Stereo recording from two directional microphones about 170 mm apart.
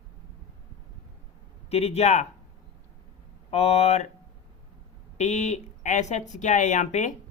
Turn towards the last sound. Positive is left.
turn(degrees=45)  # may be behind; listen again after turning